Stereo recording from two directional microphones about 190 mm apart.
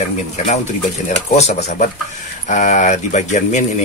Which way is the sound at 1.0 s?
35° left (ahead or behind).